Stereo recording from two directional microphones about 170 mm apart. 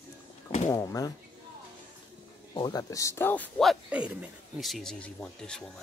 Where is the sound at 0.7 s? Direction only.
20° left (ahead or behind).